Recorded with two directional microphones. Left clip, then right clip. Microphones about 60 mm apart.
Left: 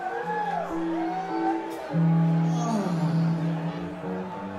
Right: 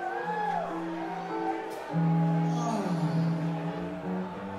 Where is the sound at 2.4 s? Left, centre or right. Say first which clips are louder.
Left 2 dB; left.